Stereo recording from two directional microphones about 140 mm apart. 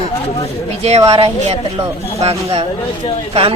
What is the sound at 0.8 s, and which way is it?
Speech, 50° right (ahead or behind).